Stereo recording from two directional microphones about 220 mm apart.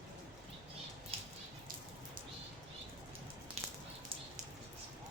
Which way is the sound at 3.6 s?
30° right (ahead or behind).